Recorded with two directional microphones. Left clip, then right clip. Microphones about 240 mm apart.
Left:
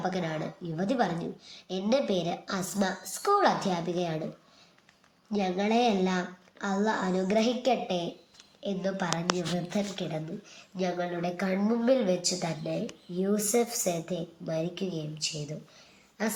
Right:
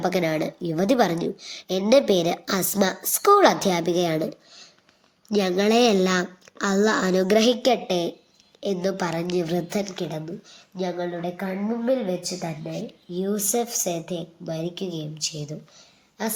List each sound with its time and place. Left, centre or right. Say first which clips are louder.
0.0 s speech: right 9 dB; right
5.3 s speech: right 8 dB; right
10.8 s a woman's voice: right 3 dB; right